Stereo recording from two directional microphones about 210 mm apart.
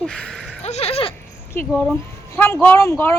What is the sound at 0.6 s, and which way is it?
Speech, 30° left (ahead or behind).